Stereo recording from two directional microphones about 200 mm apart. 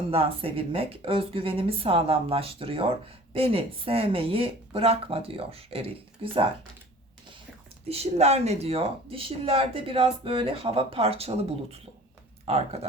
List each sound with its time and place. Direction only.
0.1 s speech: 30° right (ahead or behind)
7.9 s speech: 30° right (ahead or behind)